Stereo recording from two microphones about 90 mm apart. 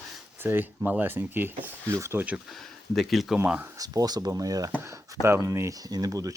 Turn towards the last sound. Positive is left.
turn(degrees=-40)  # may be behind; listen again after turning